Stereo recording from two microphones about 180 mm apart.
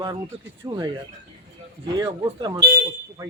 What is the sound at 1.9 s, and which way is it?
Speech, 25° right (ahead or behind).